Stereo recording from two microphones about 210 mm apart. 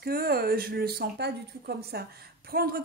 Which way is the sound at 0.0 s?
45° right (ahead or behind).